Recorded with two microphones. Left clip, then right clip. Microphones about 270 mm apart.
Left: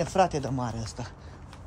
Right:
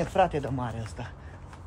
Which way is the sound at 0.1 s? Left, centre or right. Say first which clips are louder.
Right 1 dB; left.